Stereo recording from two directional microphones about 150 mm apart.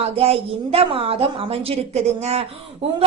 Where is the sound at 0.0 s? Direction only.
40° right (ahead or behind).